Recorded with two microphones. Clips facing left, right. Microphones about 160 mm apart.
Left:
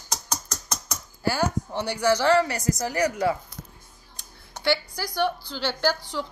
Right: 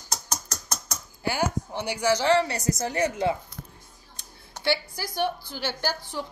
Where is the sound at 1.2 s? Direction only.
15° right (ahead or behind).